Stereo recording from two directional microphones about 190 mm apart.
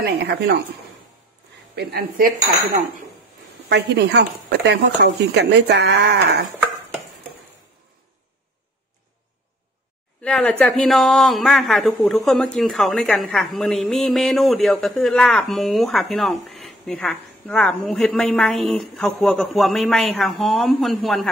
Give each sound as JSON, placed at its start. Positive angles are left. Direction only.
{"t": 1.8, "sound": "speech", "side_deg": -55}
{"t": 3.6, "sound": "speech", "side_deg": -65}
{"t": 10.2, "sound": "speech", "side_deg": 5}